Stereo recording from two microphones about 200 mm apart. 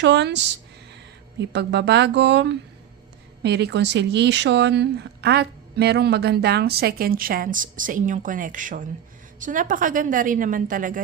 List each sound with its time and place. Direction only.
0.0 s a woman's voice: 60° right (ahead or behind); by 11.0 s 40° right (ahead or behind)